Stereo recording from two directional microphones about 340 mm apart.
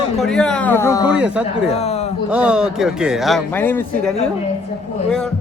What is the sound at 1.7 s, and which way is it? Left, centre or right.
Speech, centre.